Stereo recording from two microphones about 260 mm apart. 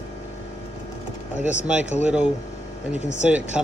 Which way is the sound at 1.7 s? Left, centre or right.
Centre.